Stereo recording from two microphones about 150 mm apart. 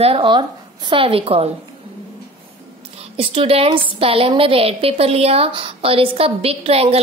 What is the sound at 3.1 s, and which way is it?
A woman's voice, 40° right (ahead or behind).